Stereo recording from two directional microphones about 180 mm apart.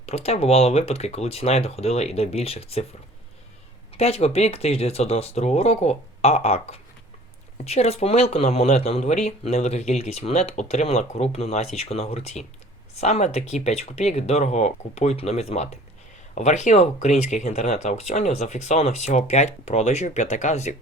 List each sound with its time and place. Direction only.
0.0 s speech: 35° left (ahead or behind)
3.9 s speech: 35° left (ahead or behind)